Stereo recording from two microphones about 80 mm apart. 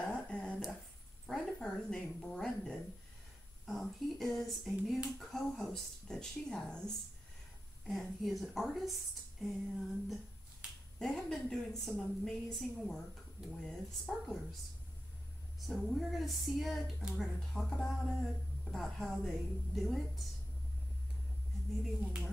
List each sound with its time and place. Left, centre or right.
0.0 s finger snapping: centre
1.2 s a sound: centre
3.6 s speech: centre
7.8 s a woman's voice: centre
15.6 s speech: centre
21.8 s speech: centre